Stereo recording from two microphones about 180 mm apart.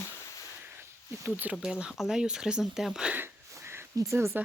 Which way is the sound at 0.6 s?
10° right (ahead or behind).